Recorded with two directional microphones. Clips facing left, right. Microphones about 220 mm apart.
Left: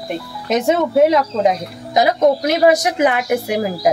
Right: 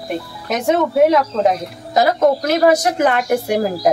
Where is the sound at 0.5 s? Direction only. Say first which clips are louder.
Left 1 dB; 20° left (ahead or behind).